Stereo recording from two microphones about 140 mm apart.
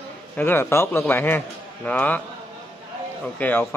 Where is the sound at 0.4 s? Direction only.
15° left (ahead or behind).